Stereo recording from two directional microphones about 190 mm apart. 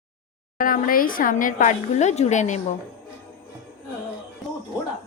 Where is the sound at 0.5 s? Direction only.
45° left (ahead or behind).